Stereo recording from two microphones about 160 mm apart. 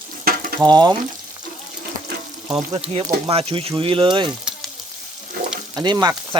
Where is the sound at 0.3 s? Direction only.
65° right (ahead or behind).